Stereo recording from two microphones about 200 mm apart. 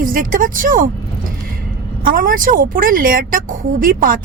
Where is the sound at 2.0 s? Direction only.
45° right (ahead or behind).